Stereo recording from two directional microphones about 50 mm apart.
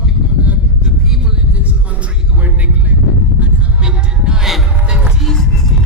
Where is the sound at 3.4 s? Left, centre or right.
Centre.